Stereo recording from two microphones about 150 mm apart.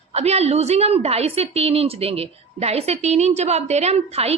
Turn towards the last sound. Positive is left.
turn(degrees=-45)  # may be behind; listen again after turning